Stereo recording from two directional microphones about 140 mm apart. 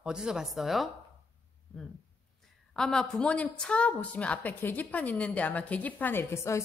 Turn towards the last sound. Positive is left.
turn(degrees=20)  # may be behind; listen again after turning